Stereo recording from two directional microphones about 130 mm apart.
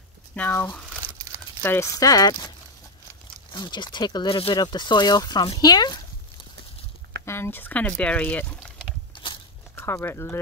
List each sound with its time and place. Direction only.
0.3 s speech: 15° left (ahead or behind)
3.5 s speech: 35° left (ahead or behind)
7.2 s speech: 20° left (ahead or behind)
9.1 s biting: 40° left (ahead or behind)
9.8 s speech: 20° left (ahead or behind)